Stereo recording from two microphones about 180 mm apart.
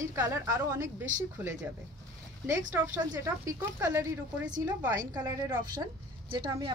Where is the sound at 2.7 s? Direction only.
10° right (ahead or behind).